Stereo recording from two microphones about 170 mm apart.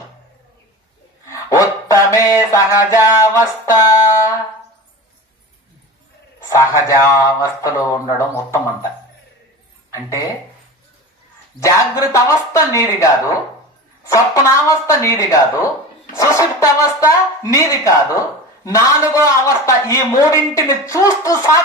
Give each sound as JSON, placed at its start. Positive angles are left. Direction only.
{"t": 1.3, "sound": "dog", "side_deg": 20}
{"t": 2.5, "sound": "speech", "side_deg": 15}
{"t": 6.4, "sound": "speech", "side_deg": 15}
{"t": 9.9, "sound": "speech", "side_deg": 20}
{"t": 11.6, "sound": "speech", "side_deg": 20}